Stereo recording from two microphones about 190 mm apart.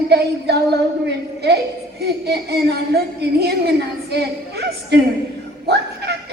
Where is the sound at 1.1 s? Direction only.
60° right (ahead or behind).